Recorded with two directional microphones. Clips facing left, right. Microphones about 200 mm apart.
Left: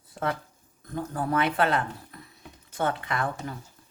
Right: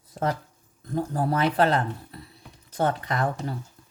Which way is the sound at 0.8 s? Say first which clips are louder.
Right 4 dB; 35° right (ahead or behind).